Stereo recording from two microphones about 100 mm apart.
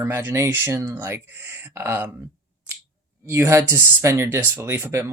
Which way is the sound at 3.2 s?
25° right (ahead or behind).